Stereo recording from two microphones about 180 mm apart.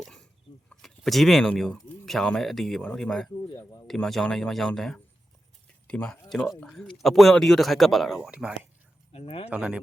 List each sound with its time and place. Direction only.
0.0 s chicken: 5° left (ahead or behind)
0.7 s speech: centre (ahead or behind)
9.1 s speech: 35° left (ahead or behind)
9.5 s speech: 5° right (ahead or behind)